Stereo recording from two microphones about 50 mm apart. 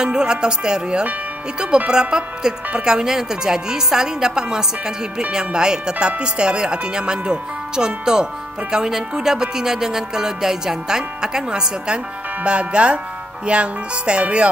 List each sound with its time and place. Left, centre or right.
0.0 s speech: centre